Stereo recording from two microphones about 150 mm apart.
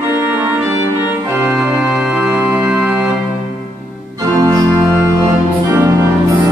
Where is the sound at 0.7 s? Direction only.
15° right (ahead or behind).